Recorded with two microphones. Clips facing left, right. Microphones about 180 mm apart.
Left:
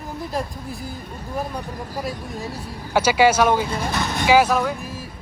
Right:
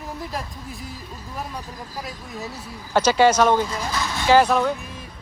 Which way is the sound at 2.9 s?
10° left (ahead or behind).